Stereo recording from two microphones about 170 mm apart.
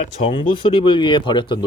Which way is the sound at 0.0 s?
30° left (ahead or behind).